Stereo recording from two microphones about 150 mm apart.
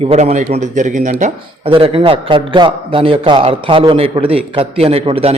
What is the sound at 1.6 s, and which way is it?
A man's voice, 40° right (ahead or behind).